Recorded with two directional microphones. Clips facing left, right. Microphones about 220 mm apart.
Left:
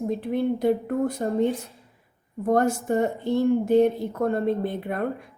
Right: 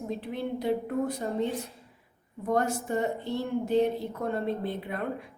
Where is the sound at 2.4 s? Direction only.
45° left (ahead or behind).